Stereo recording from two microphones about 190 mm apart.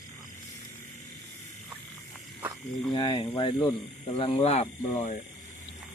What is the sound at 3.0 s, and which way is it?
Speech, 25° left (ahead or behind).